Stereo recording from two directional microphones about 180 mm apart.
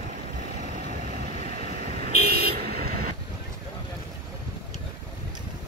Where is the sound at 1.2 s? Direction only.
50° right (ahead or behind).